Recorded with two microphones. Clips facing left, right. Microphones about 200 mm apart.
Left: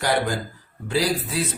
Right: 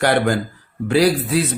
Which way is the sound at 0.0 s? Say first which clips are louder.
Right 6 dB; 65° right (ahead or behind).